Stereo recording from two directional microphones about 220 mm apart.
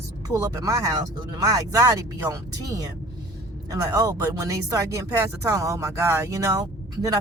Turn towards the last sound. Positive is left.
turn(degrees=-15)  # may be behind; listen again after turning